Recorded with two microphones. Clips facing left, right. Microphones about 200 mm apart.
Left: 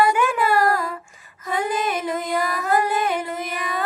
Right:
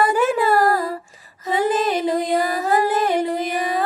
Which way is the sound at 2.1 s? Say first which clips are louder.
Right 4 dB; 35° right (ahead or behind).